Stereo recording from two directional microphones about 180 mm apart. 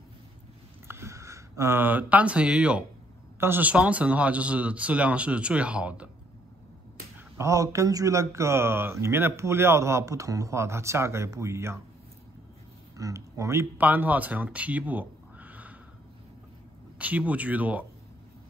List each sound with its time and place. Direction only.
0.8 s speech: 15° right (ahead or behind)
7.2 s speech: 15° right (ahead or behind)
12.9 s speech: 20° right (ahead or behind)
17.0 s speech: 10° right (ahead or behind)